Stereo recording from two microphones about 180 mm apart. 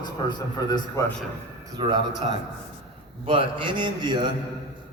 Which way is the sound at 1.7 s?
25° right (ahead or behind).